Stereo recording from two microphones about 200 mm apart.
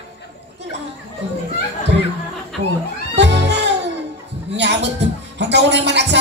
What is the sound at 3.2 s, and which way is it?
Music, 60° right (ahead or behind).